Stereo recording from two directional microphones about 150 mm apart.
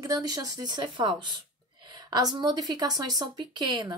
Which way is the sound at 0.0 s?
25° right (ahead or behind).